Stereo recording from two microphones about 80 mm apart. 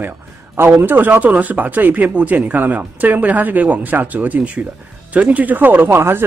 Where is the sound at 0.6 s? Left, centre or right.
Right.